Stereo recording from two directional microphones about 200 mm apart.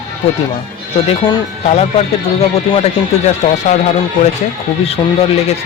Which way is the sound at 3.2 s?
35° left (ahead or behind).